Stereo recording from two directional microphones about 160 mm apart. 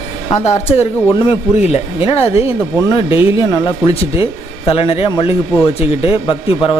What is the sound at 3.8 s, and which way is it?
Speech, 35° left (ahead or behind).